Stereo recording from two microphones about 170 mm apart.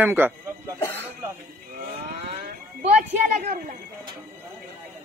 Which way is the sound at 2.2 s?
40° right (ahead or behind).